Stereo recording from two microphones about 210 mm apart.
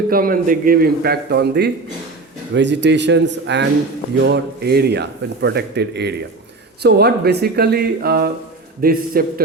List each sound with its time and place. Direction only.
0.1 s a man's voice: 45° right (ahead or behind)